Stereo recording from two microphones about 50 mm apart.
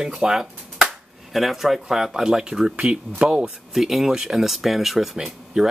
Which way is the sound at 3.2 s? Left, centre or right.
Centre.